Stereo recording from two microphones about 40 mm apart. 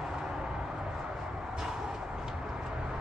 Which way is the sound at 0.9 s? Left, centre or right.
Centre.